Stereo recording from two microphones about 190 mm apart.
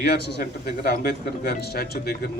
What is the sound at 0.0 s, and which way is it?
A man's voice, 60° left (ahead or behind).